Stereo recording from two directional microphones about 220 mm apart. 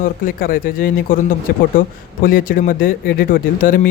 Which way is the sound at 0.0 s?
40° left (ahead or behind).